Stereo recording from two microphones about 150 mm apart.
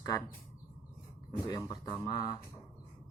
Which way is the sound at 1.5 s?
25° left (ahead or behind).